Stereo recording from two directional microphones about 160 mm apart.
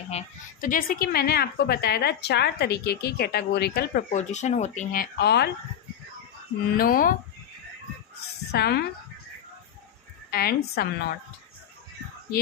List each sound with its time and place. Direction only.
0.1 s speech: 50° left (ahead or behind); by 4.0 s 85° left
4.1 s speech: 45° left (ahead or behind); by 5.5 s 90° left
6.7 s speech: 60° left (ahead or behind)
8.5 s speech: 90° left
10.3 s a woman's voice: 75° left (ahead or behind)